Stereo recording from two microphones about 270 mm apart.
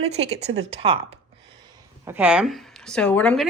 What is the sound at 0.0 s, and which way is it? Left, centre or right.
Speech, right.